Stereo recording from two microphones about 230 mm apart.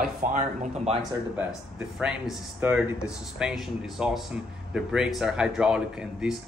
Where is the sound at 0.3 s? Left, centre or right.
Right.